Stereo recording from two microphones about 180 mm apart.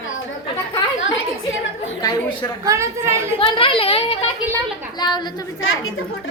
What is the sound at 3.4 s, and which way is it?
A child's voice, 30° left (ahead or behind).